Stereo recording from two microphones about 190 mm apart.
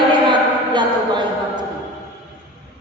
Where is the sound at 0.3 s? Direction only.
25° right (ahead or behind).